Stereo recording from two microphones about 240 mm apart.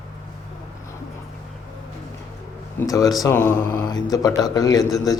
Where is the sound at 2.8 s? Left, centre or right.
Centre.